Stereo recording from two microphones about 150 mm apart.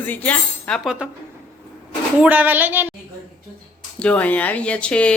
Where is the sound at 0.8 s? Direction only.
5° right (ahead or behind).